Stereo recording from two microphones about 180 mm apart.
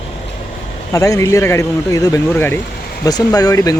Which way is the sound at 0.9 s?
20° left (ahead or behind).